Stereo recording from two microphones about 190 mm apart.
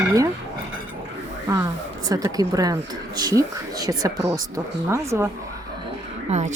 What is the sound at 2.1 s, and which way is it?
Dishes, 20° right (ahead or behind).